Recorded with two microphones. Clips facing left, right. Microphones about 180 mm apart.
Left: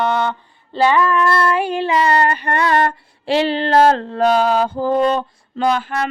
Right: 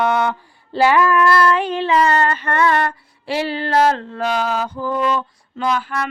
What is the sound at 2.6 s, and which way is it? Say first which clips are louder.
Mantra: left 2 dB; 40° left (ahead or behind).